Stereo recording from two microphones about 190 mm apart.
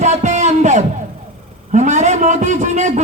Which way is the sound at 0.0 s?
40° right (ahead or behind).